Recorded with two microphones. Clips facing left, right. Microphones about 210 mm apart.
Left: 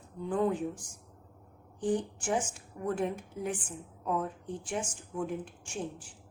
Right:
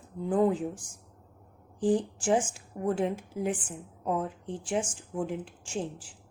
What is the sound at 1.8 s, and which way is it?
A woman's voice, 30° right (ahead or behind).